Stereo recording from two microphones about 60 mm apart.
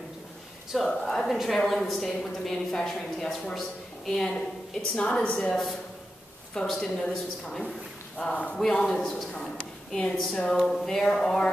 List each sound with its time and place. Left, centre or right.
0.7 s a woman's voice: centre
4.9 s a woman's voice: centre
5.5 s a woman's voice: centre
8.5 s a woman's voice: centre